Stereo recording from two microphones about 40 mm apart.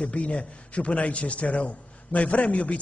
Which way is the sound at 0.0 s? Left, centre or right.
Left.